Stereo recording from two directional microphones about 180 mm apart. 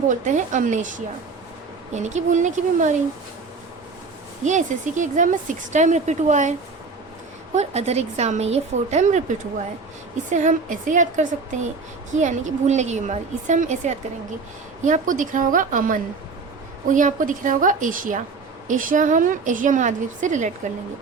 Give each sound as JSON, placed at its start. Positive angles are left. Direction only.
{"t": 0.1, "sound": "a woman's voice", "side_deg": -45}
{"t": 4.4, "sound": "a woman's voice", "side_deg": -45}
{"t": 10.3, "sound": "a woman's voice", "side_deg": -45}